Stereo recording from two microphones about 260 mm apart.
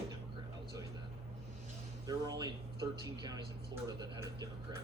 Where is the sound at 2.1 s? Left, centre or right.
Centre.